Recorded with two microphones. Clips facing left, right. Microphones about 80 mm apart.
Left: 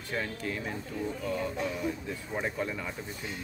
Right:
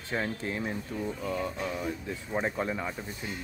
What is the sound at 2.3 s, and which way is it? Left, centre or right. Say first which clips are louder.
Speech: right 3 dB; right.